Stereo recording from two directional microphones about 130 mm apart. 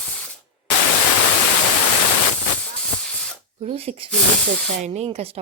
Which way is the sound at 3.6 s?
50° right (ahead or behind).